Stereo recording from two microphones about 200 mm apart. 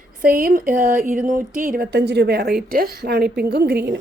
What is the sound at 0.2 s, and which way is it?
A woman's voice, 45° right (ahead or behind).